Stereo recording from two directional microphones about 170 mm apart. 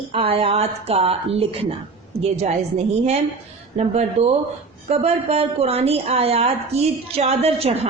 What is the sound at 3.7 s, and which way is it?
A woman's voice, 40° right (ahead or behind).